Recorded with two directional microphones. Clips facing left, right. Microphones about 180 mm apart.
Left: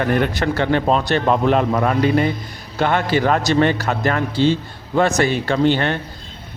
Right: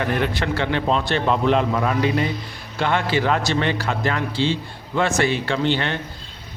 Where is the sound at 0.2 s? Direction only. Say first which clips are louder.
Left 3 dB; 45° left (ahead or behind).